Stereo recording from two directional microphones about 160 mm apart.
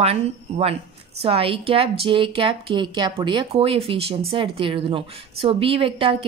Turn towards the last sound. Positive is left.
turn(degrees=-35)  # may be behind; listen again after turning